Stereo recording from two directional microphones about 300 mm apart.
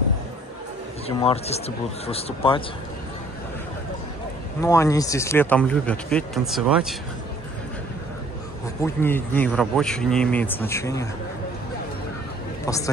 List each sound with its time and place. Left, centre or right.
1.0 s a man's voice: centre
4.6 s speech: centre
8.8 s speech: centre
12.6 s speech: centre